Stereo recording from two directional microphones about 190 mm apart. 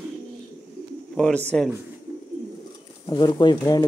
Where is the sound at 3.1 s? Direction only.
20° left (ahead or behind).